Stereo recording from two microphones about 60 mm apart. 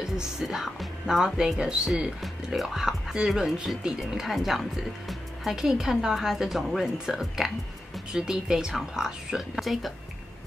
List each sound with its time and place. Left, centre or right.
0.0 s speech: centre
2.2 s speech: centre